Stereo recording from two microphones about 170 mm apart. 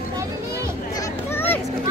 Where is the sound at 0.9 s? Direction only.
15° left (ahead or behind).